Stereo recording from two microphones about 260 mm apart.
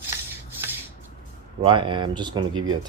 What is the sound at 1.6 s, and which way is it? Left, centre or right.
Speech, centre.